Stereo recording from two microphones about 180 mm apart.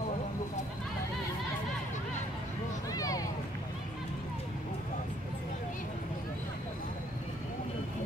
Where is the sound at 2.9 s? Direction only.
20° left (ahead or behind).